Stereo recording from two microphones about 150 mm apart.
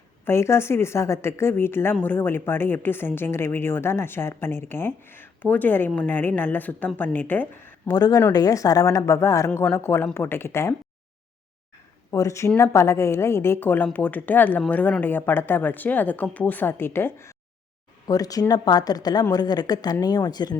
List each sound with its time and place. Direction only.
0.3 s a woman's voice: 15° left (ahead or behind)
7.9 s a woman's voice: 25° left (ahead or behind)
12.1 s a woman's voice: 20° left (ahead or behind)